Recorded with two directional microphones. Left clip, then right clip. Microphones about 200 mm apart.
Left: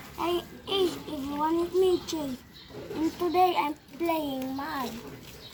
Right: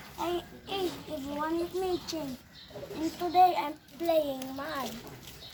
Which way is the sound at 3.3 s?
15° right (ahead or behind).